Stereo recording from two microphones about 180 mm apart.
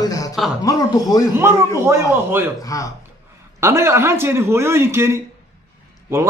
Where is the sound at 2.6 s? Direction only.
20° left (ahead or behind).